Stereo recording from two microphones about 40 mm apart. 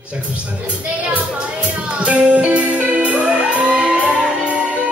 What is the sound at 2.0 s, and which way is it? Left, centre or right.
Music, right.